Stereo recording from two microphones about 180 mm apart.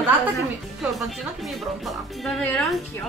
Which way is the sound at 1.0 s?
Centre (ahead or behind).